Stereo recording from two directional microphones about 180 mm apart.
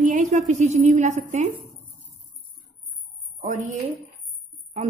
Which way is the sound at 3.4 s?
40° right (ahead or behind).